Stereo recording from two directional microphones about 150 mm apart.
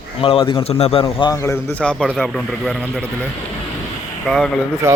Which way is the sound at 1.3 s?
20° left (ahead or behind).